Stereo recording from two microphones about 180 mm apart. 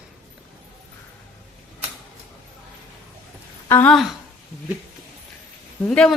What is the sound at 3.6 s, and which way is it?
Speech, 10° left (ahead or behind).